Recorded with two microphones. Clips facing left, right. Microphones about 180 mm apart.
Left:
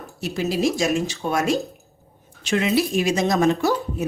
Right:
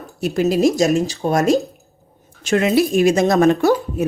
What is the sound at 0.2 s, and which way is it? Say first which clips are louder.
Speech: right 7 dB; 50° right (ahead or behind).